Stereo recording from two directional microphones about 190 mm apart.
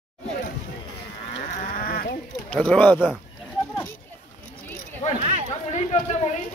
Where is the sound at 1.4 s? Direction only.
40° left (ahead or behind).